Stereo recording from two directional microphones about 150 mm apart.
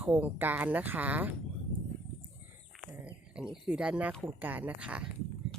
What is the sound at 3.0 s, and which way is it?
Speech, 5° right (ahead or behind).